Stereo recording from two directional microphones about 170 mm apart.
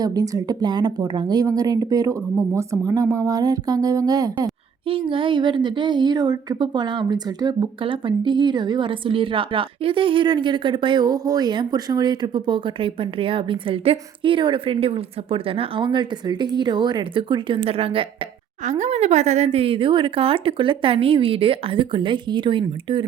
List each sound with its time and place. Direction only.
0.0 s speech: 20° right (ahead or behind)
18.6 s speech: 45° right (ahead or behind)